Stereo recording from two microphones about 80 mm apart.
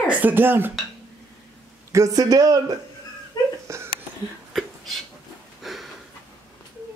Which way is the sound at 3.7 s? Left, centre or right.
Right.